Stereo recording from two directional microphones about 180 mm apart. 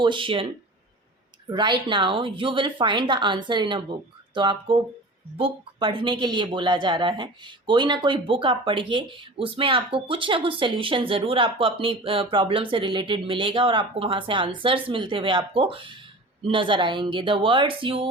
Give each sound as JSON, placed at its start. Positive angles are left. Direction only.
{"t": 0.0, "sound": "speech", "side_deg": -25}
{"t": 1.5, "sound": "speech", "side_deg": -25}